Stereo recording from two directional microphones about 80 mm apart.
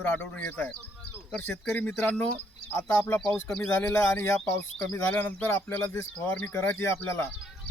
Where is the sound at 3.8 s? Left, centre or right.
Left.